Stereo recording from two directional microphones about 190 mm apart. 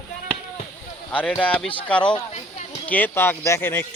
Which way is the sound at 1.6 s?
25° left (ahead or behind).